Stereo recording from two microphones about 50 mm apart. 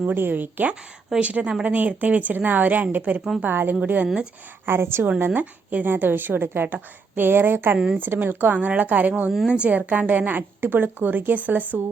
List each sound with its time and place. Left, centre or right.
0.0 s a woman's voice: right
1.2 s a woman's voice: right
3.8 s a woman's voice: right
4.6 s a woman's voice: right
5.2 s a woman's voice: right